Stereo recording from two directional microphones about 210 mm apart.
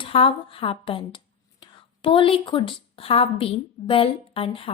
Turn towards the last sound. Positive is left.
turn(degrees=25)  # may be behind; listen again after turning